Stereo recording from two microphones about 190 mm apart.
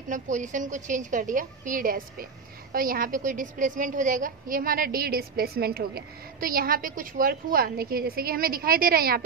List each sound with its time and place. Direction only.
0.1 s a woman's voice: 40° right (ahead or behind)